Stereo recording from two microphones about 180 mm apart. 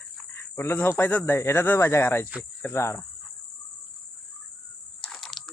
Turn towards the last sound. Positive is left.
turn(degrees=0)  # may be behind; listen again after turning